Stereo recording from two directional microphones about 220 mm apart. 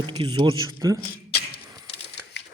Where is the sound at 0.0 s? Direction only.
20° right (ahead or behind).